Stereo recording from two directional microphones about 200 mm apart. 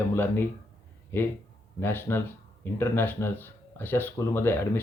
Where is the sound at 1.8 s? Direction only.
10° left (ahead or behind).